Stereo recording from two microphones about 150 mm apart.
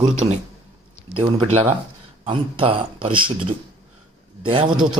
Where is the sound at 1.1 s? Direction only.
35° right (ahead or behind).